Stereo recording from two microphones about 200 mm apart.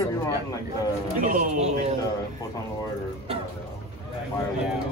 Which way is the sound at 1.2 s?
40° right (ahead or behind).